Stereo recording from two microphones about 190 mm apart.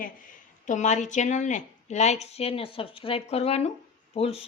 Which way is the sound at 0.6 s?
40° left (ahead or behind).